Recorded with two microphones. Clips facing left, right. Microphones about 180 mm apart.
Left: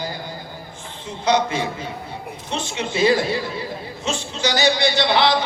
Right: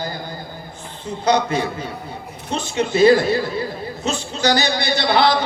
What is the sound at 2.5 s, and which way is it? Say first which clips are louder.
Speech: right 5 dB; 45° right (ahead or behind).